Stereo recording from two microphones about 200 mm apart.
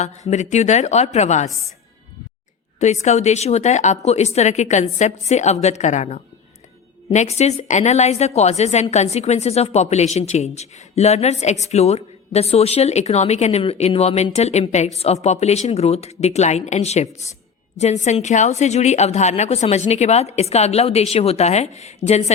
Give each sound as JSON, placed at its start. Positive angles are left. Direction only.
{"t": 0.3, "sound": "a woman's voice", "side_deg": 35}
{"t": 2.7, "sound": "a woman's voice", "side_deg": 35}